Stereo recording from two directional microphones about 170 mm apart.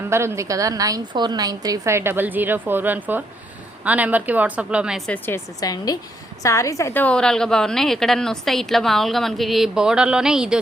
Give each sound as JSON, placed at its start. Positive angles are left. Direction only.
{"t": 0.1, "sound": "a woman's voice", "side_deg": -15}
{"t": 5.1, "sound": "a woman's voice", "side_deg": 15}